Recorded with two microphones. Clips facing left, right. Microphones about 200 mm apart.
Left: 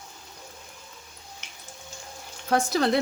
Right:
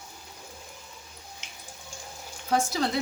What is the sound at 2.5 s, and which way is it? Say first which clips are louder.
Speech: left 4 dB; 60° left (ahead or behind).